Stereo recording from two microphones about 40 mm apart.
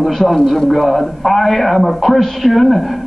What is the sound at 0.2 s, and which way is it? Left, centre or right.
Speech, centre.